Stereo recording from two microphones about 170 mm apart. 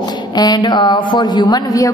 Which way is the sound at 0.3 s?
25° left (ahead or behind).